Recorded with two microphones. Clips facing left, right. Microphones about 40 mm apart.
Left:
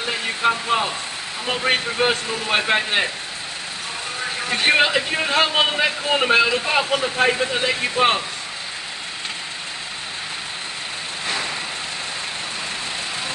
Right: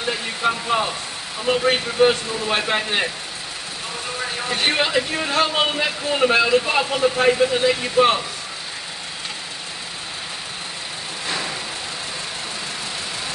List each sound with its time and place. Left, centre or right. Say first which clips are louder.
0.4 s speech: left 1 dB; centre
4.5 s speech: left 4 dB; left